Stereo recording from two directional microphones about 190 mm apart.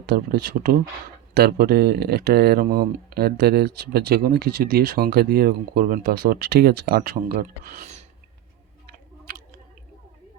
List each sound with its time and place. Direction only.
0.0 s speech: 55° right (ahead or behind); by 8.0 s 40° right (ahead or behind)